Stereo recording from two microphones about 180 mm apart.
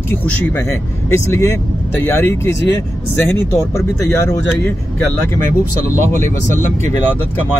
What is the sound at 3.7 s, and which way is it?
Speech, 15° left (ahead or behind).